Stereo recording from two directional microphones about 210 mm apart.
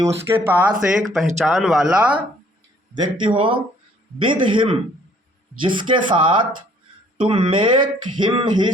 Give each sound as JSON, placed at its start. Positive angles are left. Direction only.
{"t": 0.0, "sound": "speech", "side_deg": -10}
{"t": 2.9, "sound": "speech", "side_deg": -25}